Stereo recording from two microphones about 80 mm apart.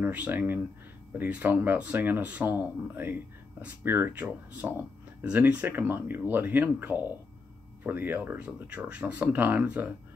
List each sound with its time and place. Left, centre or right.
0.0 s speech: right